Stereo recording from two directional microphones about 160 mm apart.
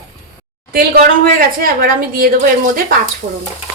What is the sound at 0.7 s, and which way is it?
A woman's voice, 65° right (ahead or behind).